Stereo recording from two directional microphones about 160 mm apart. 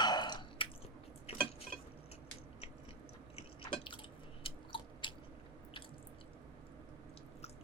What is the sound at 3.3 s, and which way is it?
Drip, 30° left (ahead or behind).